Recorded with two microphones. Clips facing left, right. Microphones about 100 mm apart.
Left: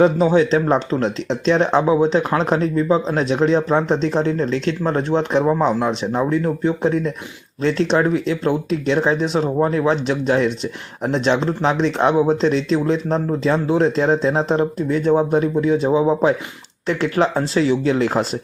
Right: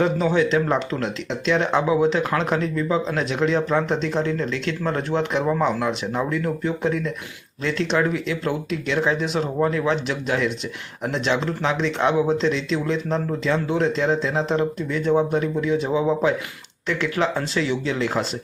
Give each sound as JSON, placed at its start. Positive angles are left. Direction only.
{"t": 0.0, "sound": "speech", "side_deg": 35}